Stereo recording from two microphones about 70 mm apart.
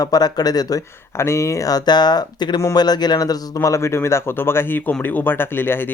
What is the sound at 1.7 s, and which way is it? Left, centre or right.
Speech, left.